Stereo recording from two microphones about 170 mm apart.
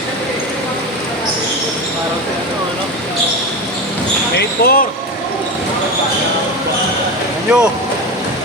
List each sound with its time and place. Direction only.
4.4 s speech: 65° left (ahead or behind)
7.5 s speech: 5° right (ahead or behind)